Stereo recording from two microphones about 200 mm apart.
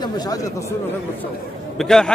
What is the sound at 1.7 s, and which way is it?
Speech, 5° left (ahead or behind).